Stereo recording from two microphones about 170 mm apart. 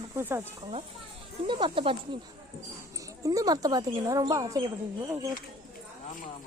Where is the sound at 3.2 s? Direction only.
20° right (ahead or behind).